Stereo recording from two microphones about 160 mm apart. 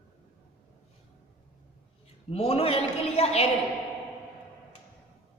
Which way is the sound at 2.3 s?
40° left (ahead or behind).